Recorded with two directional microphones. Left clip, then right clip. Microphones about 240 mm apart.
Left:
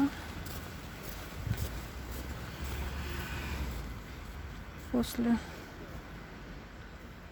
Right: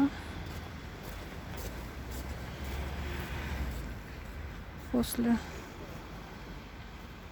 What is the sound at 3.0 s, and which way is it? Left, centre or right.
Vehicle, left.